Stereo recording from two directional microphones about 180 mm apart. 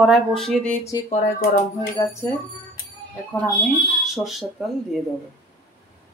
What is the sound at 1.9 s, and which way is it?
Speech, 15° left (ahead or behind).